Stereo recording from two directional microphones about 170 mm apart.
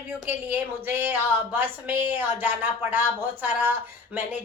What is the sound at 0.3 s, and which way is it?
Speech, 10° right (ahead or behind).